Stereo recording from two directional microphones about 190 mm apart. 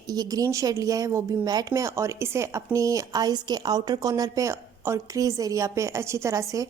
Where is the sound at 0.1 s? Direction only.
20° right (ahead or behind).